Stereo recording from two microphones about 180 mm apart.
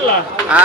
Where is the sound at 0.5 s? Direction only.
5° right (ahead or behind).